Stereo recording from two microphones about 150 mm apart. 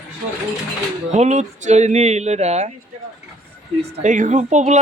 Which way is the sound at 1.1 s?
50° right (ahead or behind).